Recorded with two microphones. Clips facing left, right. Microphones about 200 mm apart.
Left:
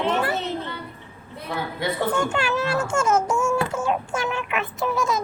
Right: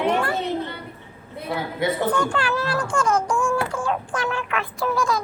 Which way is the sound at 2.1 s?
25° left (ahead or behind).